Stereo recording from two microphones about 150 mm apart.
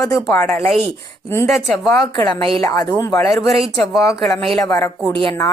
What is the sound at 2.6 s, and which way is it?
Speech, 20° left (ahead or behind).